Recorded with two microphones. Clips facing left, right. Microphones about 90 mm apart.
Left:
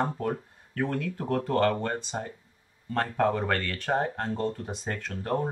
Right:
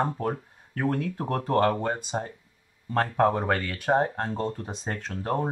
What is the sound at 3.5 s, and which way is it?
Speech, 10° right (ahead or behind).